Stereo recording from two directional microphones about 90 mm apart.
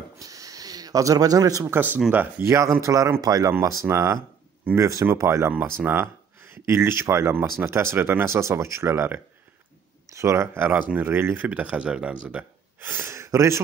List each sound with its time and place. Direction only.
0.2 s a sound: 40° right (ahead or behind)
1.7 s speech: 20° right (ahead or behind)
2.5 s speech: 35° right (ahead or behind)
3.6 s speech: 30° right (ahead or behind); by 12.4 s 15° right (ahead or behind)
12.8 s speech: 25° right (ahead or behind)